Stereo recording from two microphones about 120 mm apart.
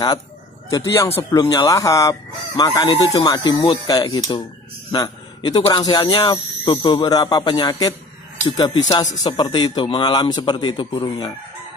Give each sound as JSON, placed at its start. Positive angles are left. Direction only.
{"t": 0.7, "sound": "speech", "side_deg": 25}
{"t": 1.4, "sound": "a man's voice", "side_deg": 40}
{"t": 1.7, "sound": "a man's voice", "side_deg": 25}